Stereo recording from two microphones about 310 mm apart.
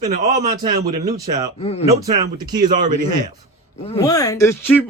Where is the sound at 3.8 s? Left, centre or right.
Centre.